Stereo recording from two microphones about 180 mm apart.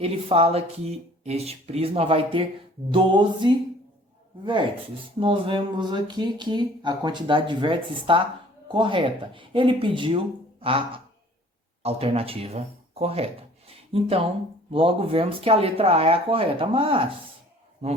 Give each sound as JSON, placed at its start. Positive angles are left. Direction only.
{"t": 0.0, "sound": "speech", "side_deg": -30}